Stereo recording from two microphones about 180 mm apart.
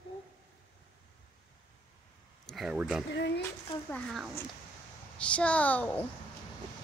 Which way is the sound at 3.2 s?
70° left (ahead or behind).